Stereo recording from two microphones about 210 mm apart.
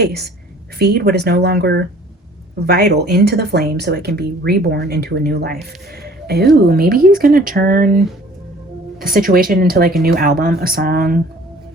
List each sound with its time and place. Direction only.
0.0 s speech: 50° right (ahead or behind)
6.0 s a sound: 50° right (ahead or behind)
6.7 s speech: 45° right (ahead or behind)